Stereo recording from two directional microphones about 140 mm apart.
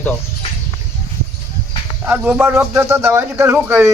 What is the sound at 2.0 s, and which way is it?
Speech, 10° right (ahead or behind).